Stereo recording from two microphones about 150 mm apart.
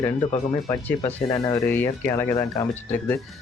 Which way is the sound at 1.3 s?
25° left (ahead or behind).